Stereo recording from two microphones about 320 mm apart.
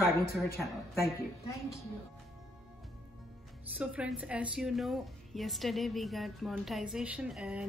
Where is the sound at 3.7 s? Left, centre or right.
Centre.